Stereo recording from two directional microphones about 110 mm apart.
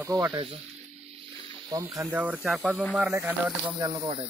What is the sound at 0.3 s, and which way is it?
Speech, 50° right (ahead or behind).